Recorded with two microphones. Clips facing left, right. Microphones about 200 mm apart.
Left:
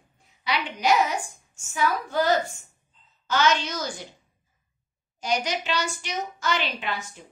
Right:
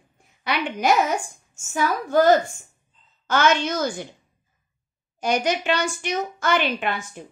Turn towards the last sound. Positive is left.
turn(degrees=-55)  # may be behind; listen again after turning